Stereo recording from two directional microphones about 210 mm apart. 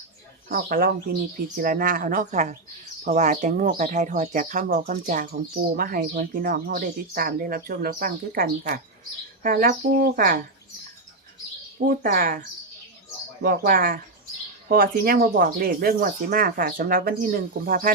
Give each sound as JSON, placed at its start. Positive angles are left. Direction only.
{"t": 0.4, "sound": "speech", "side_deg": -45}
{"t": 11.9, "sound": "speech", "side_deg": -40}
{"t": 13.4, "sound": "speech", "side_deg": -45}